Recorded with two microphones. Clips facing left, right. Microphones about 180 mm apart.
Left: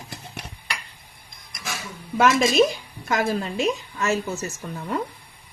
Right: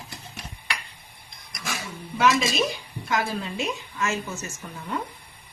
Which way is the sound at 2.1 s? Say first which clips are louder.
Left 4 dB; 50° left (ahead or behind).